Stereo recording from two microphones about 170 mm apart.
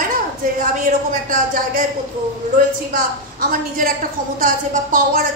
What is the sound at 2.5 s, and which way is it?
A woman's voice, 55° right (ahead or behind).